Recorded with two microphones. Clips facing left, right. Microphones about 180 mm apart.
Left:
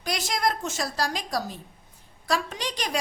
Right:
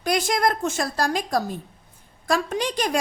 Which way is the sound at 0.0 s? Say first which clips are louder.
Right 5 dB; 50° right (ahead or behind).